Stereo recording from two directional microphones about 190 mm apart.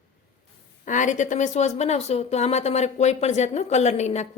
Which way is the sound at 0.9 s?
40° left (ahead or behind).